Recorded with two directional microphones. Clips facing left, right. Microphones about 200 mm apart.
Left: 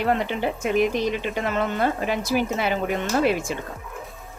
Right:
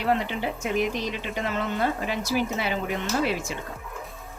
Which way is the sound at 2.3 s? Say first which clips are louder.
Left 2 dB; 60° left (ahead or behind).